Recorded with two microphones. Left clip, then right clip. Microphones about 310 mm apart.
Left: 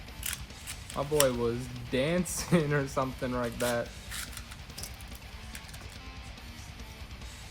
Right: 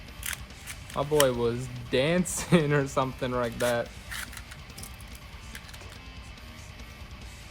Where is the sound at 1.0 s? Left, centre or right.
Right.